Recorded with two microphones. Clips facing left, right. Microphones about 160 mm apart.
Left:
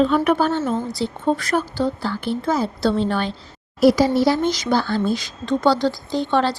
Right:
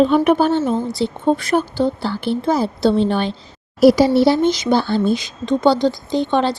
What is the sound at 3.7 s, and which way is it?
Speech, 35° right (ahead or behind).